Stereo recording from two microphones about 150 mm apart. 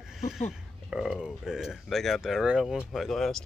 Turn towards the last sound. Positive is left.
turn(degrees=0)  # may be behind; listen again after turning